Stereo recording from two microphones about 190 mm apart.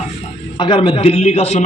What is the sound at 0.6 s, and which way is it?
A man's voice, 25° left (ahead or behind).